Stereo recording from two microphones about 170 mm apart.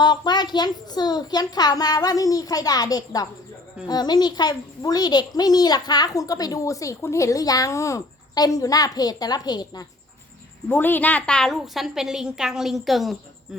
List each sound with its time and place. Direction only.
0.0 s a child's voice: 25° left (ahead or behind)
10.7 s a woman's voice: 10° left (ahead or behind)